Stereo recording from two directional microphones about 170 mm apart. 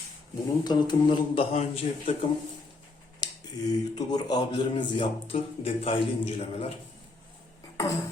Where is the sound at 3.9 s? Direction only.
25° left (ahead or behind).